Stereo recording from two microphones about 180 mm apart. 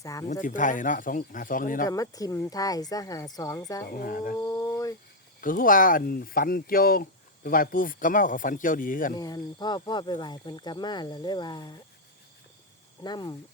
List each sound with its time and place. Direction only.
0.0 s speech: 20° left (ahead or behind)
0.4 s speech: 45° left (ahead or behind)
1.9 s speech: 20° left (ahead or behind)
3.8 s speech: 55° left (ahead or behind)
4.4 s a sound: 15° left (ahead or behind)
5.4 s speech: 50° left (ahead or behind)
9.1 s speech: 20° left (ahead or behind)
13.0 s speech: 25° left (ahead or behind)